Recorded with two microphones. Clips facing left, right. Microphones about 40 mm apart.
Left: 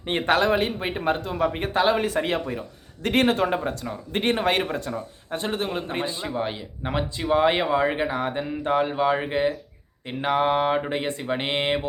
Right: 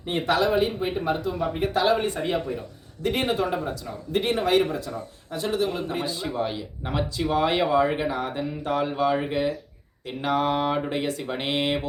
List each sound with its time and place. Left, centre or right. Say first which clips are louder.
0.0 s speech: left 2 dB; left
1.7 s speech: even; left
2.1 s speech: left 2 dB; left